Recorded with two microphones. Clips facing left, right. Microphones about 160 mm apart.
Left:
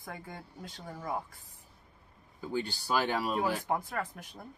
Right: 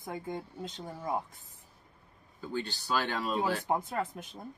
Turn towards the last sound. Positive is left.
turn(degrees=-20)  # may be behind; listen again after turning